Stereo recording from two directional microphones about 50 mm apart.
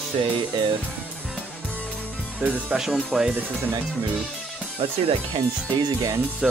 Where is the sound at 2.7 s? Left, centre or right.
Centre.